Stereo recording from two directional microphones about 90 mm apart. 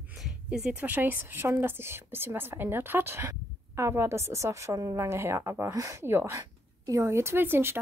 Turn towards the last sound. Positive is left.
turn(degrees=-25)  # may be behind; listen again after turning